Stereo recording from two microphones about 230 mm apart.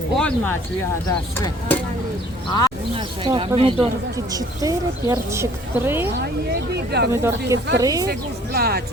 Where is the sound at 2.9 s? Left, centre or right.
Right.